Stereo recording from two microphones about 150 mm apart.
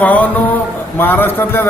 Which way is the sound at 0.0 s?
10° left (ahead or behind).